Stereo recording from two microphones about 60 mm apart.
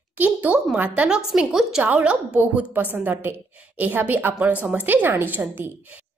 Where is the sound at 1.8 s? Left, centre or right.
Right.